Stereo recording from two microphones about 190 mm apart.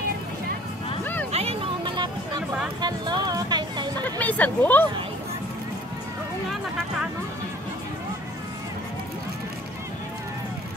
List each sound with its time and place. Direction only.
1.3 s music: 30° right (ahead or behind)
2.8 s a sound: 20° right (ahead or behind)
4.0 s speech: 10° left (ahead or behind)